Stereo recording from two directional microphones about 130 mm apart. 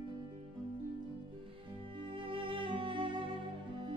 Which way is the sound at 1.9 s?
40° right (ahead or behind).